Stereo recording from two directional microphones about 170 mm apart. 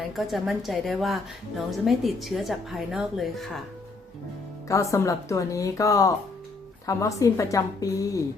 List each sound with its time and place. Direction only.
0.2 s a woman's voice: centre (ahead or behind)
4.7 s a woman's voice: 20° left (ahead or behind)